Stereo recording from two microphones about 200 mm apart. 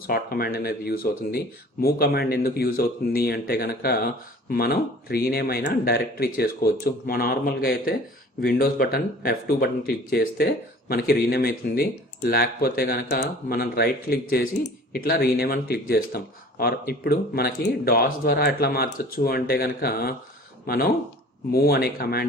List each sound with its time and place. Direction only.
0.1 s speech: 50° left (ahead or behind)